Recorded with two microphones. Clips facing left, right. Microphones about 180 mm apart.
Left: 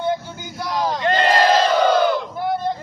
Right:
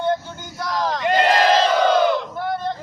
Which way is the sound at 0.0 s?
5° left (ahead or behind).